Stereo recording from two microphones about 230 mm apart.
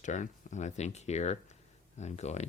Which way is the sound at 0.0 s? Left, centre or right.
Left.